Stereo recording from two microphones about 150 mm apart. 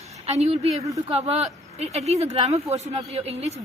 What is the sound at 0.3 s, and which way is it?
A woman's voice, 45° right (ahead or behind).